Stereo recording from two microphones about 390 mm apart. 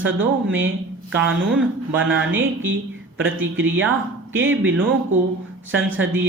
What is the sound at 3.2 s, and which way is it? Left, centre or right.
Speech, right.